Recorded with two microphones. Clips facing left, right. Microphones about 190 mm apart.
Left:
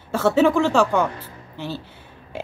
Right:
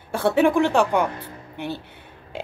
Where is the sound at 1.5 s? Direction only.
15° right (ahead or behind).